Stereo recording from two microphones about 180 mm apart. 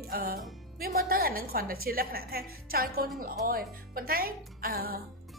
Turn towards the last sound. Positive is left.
turn(degrees=-60)  # may be behind; listen again after turning